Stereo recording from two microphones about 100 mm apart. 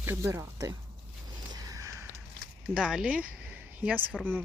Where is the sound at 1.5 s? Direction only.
35° right (ahead or behind).